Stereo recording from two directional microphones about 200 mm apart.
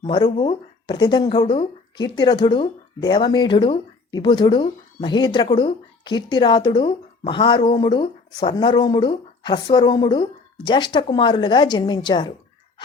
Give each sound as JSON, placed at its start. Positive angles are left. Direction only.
{"t": 0.0, "sound": "speech", "side_deg": 25}